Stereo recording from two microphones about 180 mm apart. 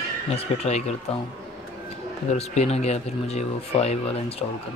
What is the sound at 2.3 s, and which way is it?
Speech, 35° left (ahead or behind).